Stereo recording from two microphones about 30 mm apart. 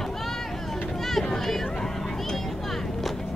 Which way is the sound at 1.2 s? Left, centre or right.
Centre.